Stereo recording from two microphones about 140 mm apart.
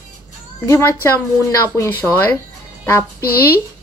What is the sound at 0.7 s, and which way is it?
A woman's voice, 20° left (ahead or behind).